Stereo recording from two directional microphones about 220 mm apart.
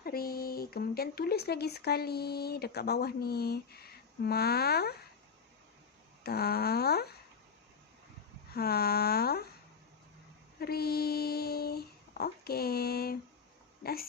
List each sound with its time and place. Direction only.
0.0 s speech: 45° left (ahead or behind)
6.2 s speech: 45° left (ahead or behind)
8.5 s speech: 45° left (ahead or behind)
10.6 s child singing: 45° left (ahead or behind)
13.8 s speech: 45° left (ahead or behind)